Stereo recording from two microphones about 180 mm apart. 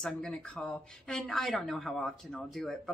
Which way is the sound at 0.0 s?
5° left (ahead or behind).